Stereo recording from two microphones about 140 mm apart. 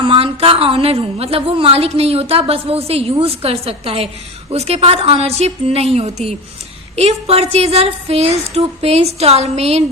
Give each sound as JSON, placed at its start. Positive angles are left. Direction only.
{"t": 0.0, "sound": "a woman's voice", "side_deg": -45}